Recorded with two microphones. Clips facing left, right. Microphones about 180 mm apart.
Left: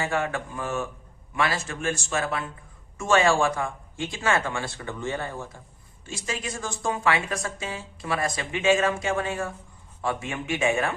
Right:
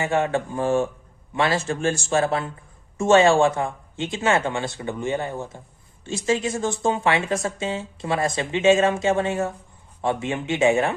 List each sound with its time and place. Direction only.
0.0 s speech: 25° right (ahead or behind)